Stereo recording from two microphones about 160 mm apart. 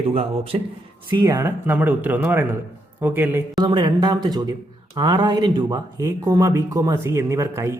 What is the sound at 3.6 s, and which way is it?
Speech, 25° right (ahead or behind).